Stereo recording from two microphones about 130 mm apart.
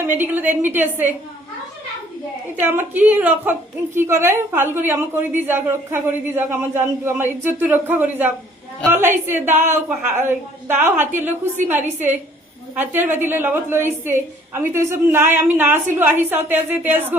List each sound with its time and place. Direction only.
0.0 s a woman's voice: 15° right (ahead or behind)
2.6 s a woman's voice: 15° right (ahead or behind)
12.7 s a woman's voice: 15° right (ahead or behind)